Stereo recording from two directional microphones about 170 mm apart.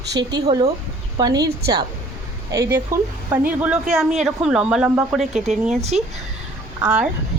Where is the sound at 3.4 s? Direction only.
5° right (ahead or behind).